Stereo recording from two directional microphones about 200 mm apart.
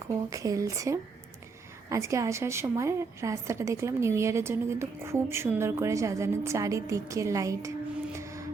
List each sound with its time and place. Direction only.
0.1 s a woman's voice: 15° right (ahead or behind)
8.2 s music: 15° right (ahead or behind)